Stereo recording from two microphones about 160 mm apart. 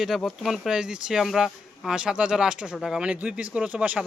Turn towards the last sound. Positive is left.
turn(degrees=-5)  # may be behind; listen again after turning